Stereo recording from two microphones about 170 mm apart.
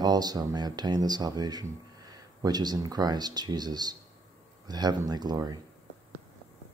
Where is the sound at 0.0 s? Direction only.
25° right (ahead or behind).